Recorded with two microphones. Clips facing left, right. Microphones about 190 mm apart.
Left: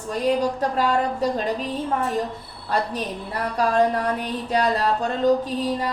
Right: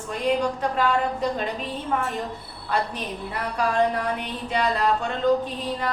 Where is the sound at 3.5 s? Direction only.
35° left (ahead or behind).